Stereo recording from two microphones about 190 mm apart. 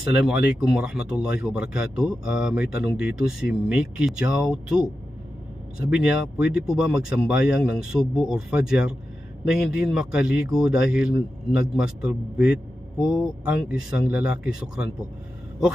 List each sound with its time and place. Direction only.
0.3 s speech: 5° right (ahead or behind)
5.9 s speech: 5° right (ahead or behind)